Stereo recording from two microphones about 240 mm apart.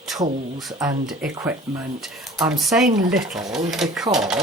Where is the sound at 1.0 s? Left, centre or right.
Centre.